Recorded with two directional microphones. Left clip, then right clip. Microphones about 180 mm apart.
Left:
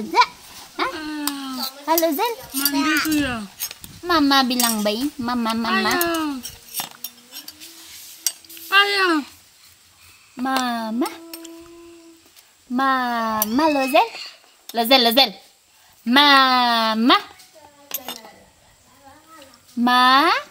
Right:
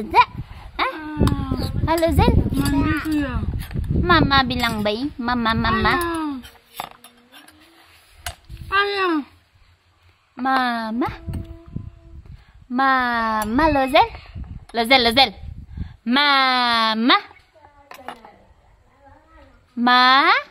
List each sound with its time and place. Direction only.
0.7 s dog: 25° right (ahead or behind)
1.9 s speech: 15° right (ahead or behind)
2.6 s a woman's voice: centre (ahead or behind)
3.1 s speech: 10° right (ahead or behind)
8.6 s a sound: 15° right (ahead or behind)
10.4 s speech: 10° right (ahead or behind)
12.7 s a woman's voice: 5° right (ahead or behind)
19.8 s speech: 10° right (ahead or behind)